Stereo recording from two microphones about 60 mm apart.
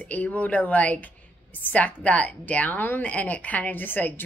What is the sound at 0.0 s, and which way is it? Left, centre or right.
A woman's voice, left.